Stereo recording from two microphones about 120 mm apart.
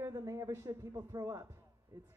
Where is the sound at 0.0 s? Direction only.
25° right (ahead or behind).